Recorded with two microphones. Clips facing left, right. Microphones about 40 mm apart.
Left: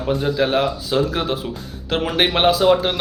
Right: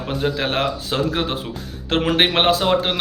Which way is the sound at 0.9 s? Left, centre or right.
Right.